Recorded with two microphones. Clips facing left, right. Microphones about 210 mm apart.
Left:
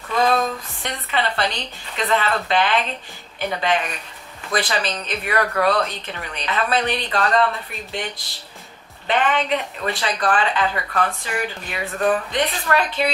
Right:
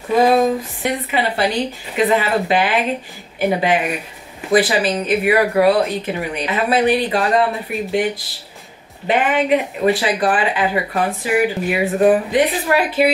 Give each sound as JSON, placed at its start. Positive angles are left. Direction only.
{"t": 0.1, "sound": "speech", "side_deg": -10}